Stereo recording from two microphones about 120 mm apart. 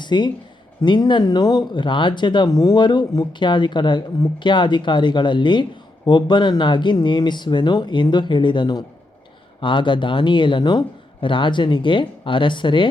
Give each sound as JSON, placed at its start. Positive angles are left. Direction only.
{"t": 0.0, "sound": "speech", "side_deg": 40}